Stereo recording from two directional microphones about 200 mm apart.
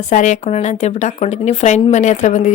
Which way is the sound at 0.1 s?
35° left (ahead or behind).